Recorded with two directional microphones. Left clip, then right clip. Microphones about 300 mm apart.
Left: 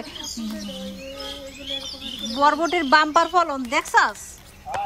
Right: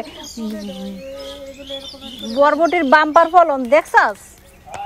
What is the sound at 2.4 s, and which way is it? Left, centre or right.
Speech, centre.